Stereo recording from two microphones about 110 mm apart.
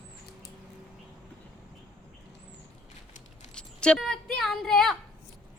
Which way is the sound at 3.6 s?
10° left (ahead or behind).